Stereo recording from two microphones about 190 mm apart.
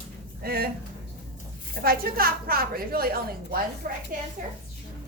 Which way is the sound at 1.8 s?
50° right (ahead or behind).